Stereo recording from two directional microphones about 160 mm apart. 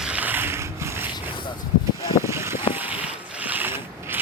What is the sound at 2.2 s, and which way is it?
Boat, 15° right (ahead or behind).